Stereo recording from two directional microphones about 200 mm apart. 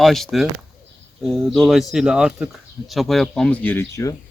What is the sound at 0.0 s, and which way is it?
Speech, centre (ahead or behind).